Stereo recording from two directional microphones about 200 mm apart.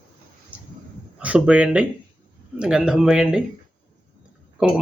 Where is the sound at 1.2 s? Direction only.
5° right (ahead or behind).